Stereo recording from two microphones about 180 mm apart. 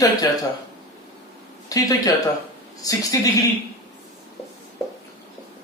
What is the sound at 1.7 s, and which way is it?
Speech, 20° left (ahead or behind).